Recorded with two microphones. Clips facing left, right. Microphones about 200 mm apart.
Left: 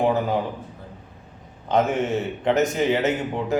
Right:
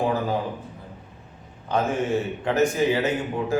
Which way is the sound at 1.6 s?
20° left (ahead or behind).